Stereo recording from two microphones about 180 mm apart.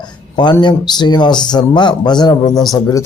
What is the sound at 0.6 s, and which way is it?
A man's voice, 25° left (ahead or behind).